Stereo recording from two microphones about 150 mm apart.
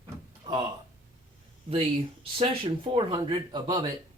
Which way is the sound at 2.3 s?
35° right (ahead or behind).